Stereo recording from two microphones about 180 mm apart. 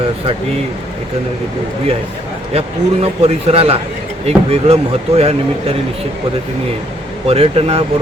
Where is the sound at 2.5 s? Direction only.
35° right (ahead or behind).